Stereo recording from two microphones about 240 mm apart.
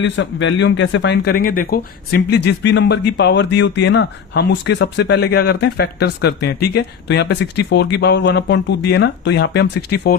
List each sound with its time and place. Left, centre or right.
0.0 s speech: left